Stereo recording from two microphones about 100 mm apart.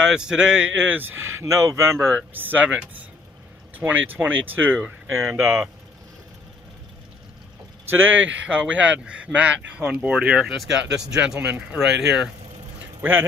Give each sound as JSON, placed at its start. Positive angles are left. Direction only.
{"t": 0.0, "sound": "speech", "side_deg": -5}
{"t": 7.9, "sound": "speech", "side_deg": -20}
{"t": 13.0, "sound": "speech", "side_deg": -20}